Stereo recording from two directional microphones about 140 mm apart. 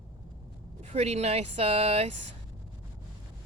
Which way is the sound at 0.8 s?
50° right (ahead or behind).